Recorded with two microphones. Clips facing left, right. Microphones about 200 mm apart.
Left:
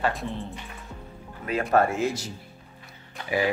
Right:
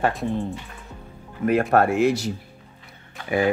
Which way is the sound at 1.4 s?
50° right (ahead or behind).